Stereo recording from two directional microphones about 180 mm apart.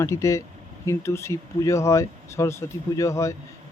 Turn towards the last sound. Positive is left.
turn(degrees=15)  # may be behind; listen again after turning